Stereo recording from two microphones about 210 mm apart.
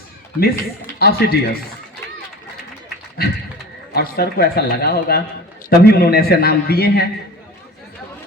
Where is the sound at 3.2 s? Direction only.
50° left (ahead or behind).